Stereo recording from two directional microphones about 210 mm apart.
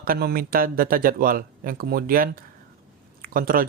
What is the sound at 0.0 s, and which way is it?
Speech, 45° right (ahead or behind).